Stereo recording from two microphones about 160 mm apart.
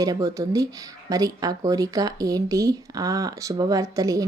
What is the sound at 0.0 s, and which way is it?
Speech, 20° right (ahead or behind).